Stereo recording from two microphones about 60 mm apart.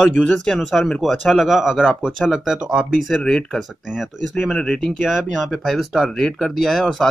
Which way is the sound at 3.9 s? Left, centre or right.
Centre.